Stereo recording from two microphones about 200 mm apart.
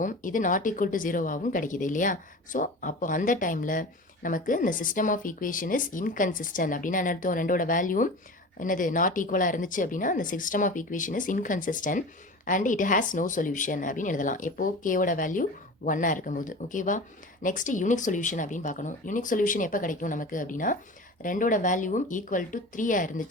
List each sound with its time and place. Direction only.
0.0 s speech: 40° left (ahead or behind)